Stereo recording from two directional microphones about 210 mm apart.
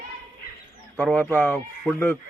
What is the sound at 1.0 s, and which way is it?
Speech, 10° left (ahead or behind).